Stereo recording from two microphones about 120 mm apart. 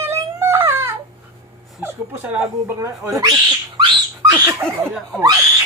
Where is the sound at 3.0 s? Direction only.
30° right (ahead or behind).